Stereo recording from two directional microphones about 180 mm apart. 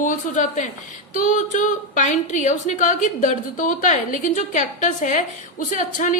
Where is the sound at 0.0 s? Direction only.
45° left (ahead or behind).